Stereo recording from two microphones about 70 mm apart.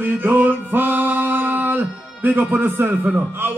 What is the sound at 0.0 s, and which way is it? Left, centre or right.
Music, right.